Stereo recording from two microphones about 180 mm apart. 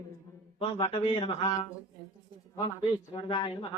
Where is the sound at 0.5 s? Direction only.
30° left (ahead or behind).